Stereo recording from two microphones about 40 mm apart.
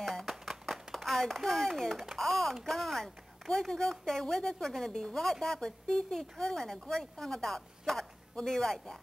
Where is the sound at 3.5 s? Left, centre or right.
Centre.